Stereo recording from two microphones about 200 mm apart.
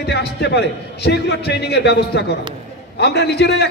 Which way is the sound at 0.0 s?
55° left (ahead or behind).